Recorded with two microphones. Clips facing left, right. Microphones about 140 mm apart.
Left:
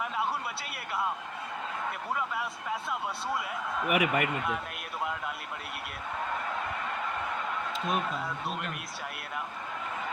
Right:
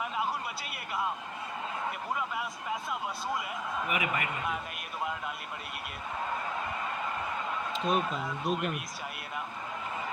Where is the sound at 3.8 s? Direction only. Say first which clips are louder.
Left 7 dB; 65° left (ahead or behind).